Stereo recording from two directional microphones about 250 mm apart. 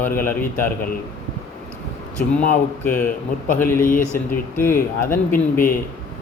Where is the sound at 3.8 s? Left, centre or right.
Left.